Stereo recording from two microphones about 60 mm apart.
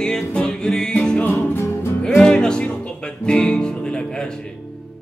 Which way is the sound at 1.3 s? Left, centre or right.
Left.